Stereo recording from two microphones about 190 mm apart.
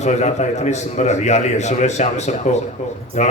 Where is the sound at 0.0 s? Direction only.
35° left (ahead or behind).